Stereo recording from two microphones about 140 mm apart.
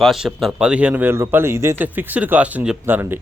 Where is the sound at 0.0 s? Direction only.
Centre (ahead or behind).